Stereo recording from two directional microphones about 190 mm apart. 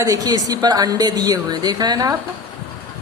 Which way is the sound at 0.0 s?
20° right (ahead or behind).